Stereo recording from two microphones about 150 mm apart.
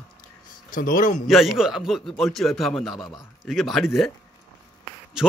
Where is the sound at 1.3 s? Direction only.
Centre (ahead or behind).